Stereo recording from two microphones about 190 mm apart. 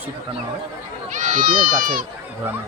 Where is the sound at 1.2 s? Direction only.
45° right (ahead or behind).